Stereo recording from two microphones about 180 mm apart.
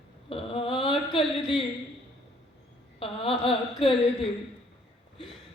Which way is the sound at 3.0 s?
30° left (ahead or behind).